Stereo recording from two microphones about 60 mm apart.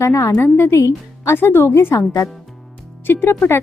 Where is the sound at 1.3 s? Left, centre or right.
Left.